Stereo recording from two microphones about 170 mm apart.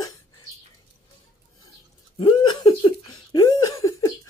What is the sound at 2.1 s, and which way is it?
Laughter, 25° left (ahead or behind).